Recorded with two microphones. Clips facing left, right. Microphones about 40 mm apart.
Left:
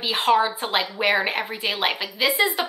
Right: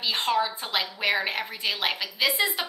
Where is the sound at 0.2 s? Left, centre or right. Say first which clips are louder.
Left 9 dB; left.